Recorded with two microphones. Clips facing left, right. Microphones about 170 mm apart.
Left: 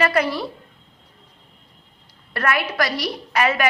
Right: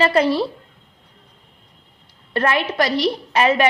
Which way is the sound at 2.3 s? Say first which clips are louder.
Right 3 dB; 25° right (ahead or behind).